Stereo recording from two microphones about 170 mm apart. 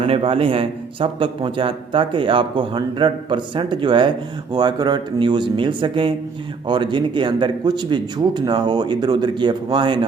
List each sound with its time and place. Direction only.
0.0 s a man's voice: 30° right (ahead or behind)